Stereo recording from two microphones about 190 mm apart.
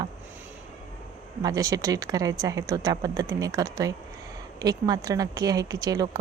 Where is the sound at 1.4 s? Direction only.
20° right (ahead or behind).